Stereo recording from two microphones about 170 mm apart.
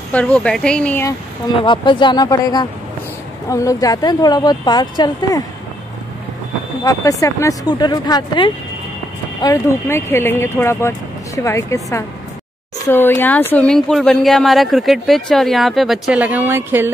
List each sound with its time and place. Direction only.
0.1 s speech: 10° left (ahead or behind)
1.6 s a woman's voice: 30° left (ahead or behind)
6.8 s a woman's voice: 20° left (ahead or behind); by 16.9 s 15° right (ahead or behind)